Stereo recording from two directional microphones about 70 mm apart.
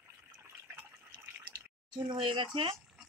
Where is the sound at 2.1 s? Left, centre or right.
Right.